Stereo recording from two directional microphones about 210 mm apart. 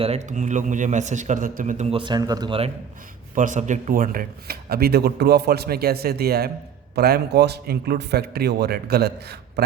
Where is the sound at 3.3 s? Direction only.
35° right (ahead or behind).